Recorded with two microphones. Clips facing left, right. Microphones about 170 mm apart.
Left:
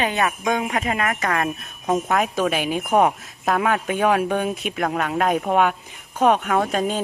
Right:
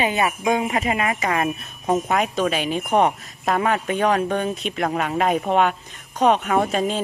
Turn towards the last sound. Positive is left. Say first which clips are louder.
# right 1 dB
turn(degrees=0)  # may be behind; listen again after turning